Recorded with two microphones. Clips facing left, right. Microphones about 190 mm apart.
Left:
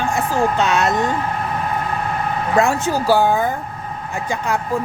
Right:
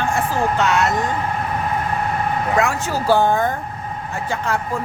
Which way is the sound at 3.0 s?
10° left (ahead or behind).